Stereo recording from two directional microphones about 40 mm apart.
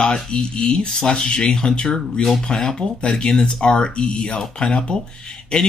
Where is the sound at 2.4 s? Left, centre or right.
Centre.